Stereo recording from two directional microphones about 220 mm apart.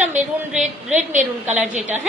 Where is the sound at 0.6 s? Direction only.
30° right (ahead or behind).